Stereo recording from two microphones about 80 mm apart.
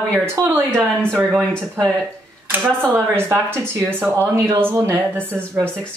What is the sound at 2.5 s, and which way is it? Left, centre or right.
Speech, right.